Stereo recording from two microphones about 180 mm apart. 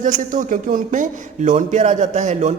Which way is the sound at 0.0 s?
45° right (ahead or behind).